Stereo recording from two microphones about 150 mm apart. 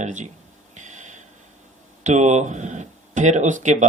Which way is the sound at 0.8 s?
55° right (ahead or behind).